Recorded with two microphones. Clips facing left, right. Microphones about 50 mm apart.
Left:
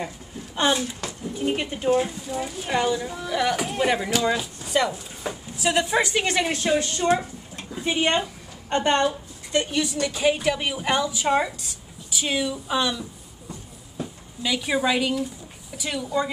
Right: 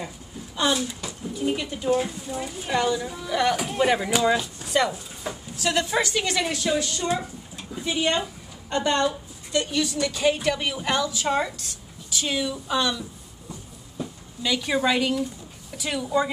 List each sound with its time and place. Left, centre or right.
0.6 s speech: left
2.0 s a woman's voice: centre
5.2 s a woman's voice: centre